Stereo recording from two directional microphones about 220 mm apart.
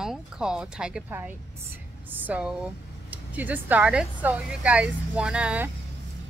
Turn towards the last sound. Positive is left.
turn(degrees=-5)  # may be behind; listen again after turning